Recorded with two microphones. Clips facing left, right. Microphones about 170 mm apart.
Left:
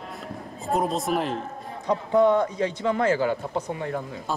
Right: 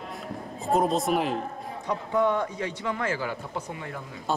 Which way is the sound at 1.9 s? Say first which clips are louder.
Left 5 dB; 35° left (ahead or behind).